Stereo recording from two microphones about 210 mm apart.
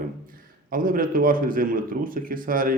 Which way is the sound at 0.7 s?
40° right (ahead or behind).